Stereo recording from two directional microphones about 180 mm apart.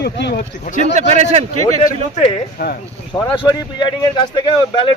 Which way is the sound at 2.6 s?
60° left (ahead or behind).